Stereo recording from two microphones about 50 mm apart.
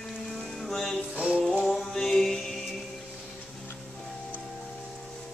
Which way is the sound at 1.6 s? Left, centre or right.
Centre.